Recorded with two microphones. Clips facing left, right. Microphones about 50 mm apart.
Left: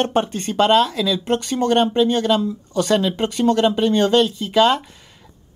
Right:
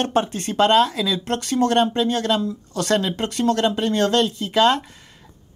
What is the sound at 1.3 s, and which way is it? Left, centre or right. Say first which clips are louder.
Speech: even; centre.